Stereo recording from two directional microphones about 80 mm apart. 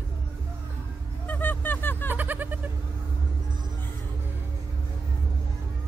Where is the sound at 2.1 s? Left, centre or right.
Right.